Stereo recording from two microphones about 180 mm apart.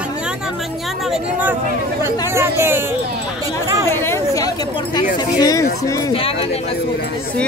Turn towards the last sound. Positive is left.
turn(degrees=30)  # may be behind; listen again after turning